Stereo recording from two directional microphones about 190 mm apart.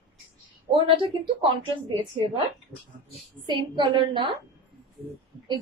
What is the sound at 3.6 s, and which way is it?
Speech, 25° right (ahead or behind).